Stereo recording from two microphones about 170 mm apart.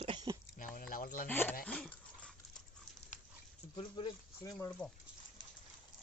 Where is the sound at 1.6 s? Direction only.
5° left (ahead or behind).